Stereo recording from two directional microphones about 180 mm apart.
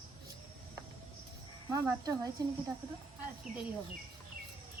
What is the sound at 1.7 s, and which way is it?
Speech, 20° right (ahead or behind).